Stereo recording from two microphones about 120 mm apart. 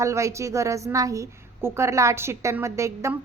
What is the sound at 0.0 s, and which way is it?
A woman's voice, 25° right (ahead or behind).